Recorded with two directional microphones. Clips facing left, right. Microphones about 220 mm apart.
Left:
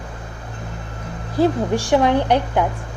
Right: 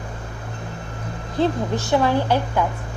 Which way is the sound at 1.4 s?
10° left (ahead or behind).